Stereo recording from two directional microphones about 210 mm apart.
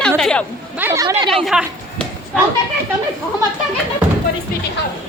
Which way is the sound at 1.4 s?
Centre (ahead or behind).